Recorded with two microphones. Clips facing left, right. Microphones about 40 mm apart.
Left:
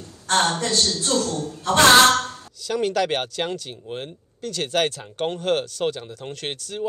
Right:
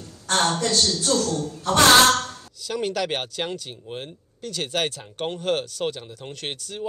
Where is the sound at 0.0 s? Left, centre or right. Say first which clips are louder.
Left 2 dB; left.